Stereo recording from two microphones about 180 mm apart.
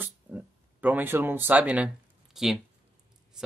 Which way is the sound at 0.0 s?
10° right (ahead or behind).